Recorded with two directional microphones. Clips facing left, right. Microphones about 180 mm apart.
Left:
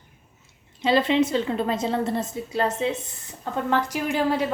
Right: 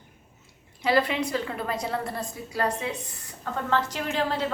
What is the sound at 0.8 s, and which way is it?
A woman's voice, 25° left (ahead or behind).